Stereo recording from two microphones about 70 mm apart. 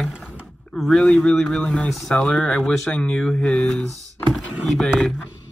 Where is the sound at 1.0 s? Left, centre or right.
Centre.